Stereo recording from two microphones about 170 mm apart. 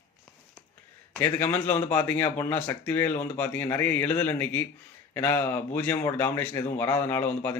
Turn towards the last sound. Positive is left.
turn(degrees=10)  # may be behind; listen again after turning